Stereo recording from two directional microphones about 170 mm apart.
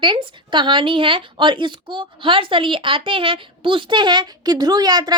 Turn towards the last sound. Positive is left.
turn(degrees=-25)  # may be behind; listen again after turning